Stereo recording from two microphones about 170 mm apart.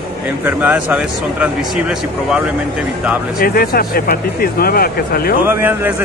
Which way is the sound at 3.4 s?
60° left (ahead or behind).